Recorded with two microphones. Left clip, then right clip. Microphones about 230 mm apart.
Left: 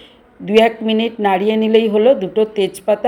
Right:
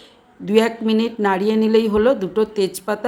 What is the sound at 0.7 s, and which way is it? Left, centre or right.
A woman's voice, right.